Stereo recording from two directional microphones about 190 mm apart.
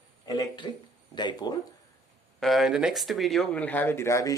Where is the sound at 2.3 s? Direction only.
Centre (ahead or behind).